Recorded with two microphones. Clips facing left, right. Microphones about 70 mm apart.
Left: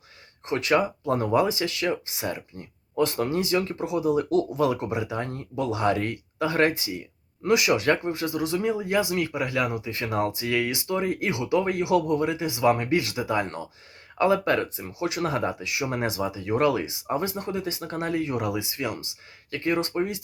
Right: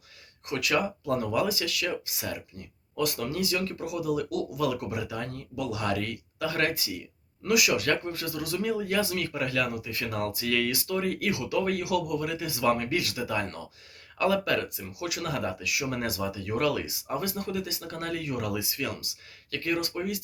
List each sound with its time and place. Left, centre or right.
0.4 s speech: left